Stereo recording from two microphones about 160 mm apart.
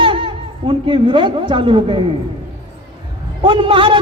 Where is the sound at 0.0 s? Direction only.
30° right (ahead or behind).